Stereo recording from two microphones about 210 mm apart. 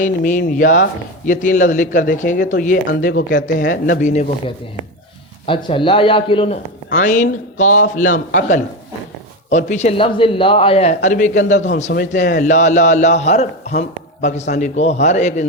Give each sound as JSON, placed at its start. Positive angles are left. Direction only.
{"t": 0.0, "sound": "a man's voice", "side_deg": 40}
{"t": 5.5, "sound": "a man's voice", "side_deg": 25}